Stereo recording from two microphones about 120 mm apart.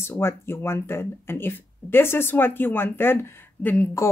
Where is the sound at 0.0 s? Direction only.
20° left (ahead or behind).